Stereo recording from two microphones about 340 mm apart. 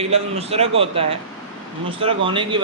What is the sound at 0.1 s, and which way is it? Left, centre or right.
A man's voice, centre.